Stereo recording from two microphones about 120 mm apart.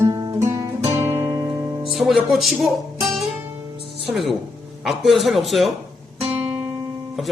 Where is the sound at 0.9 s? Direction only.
60° right (ahead or behind).